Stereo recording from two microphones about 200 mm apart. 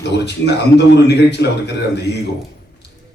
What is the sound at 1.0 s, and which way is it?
Speech, 55° left (ahead or behind).